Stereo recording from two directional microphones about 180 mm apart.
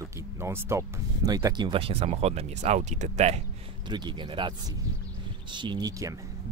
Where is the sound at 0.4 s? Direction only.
15° right (ahead or behind); by 3.3 s 40° right (ahead or behind).